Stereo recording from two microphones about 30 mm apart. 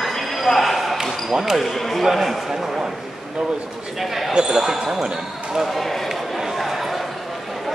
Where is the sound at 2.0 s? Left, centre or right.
Centre.